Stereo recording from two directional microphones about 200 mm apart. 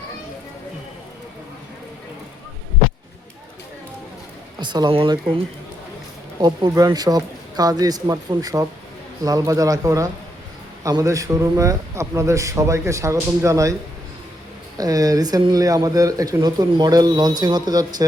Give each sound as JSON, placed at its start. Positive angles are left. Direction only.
{"t": 4.6, "sound": "speech", "side_deg": -20}
{"t": 6.4, "sound": "a man's voice", "side_deg": -20}
{"t": 14.8, "sound": "speech", "side_deg": -15}